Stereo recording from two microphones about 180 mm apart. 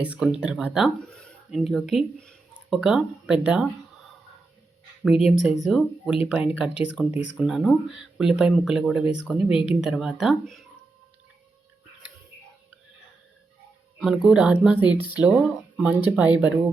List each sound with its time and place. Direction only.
0.0 s speech: 5° right (ahead or behind)
5.0 s speech: 5° right (ahead or behind)
9.5 s speech: 30° left (ahead or behind)
9.8 s speech: 5° right (ahead or behind)
14.0 s speech: 5° right (ahead or behind)